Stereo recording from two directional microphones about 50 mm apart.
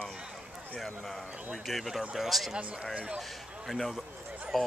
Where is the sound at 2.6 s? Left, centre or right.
Right.